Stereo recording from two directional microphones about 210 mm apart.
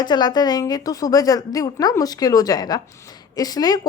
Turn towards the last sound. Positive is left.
turn(degrees=20)  # may be behind; listen again after turning